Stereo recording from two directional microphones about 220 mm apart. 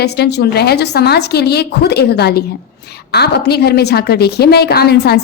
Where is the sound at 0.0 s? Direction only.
50° left (ahead or behind).